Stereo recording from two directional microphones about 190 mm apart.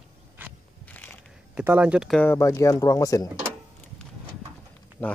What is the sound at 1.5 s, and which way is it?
Speech, 5° right (ahead or behind).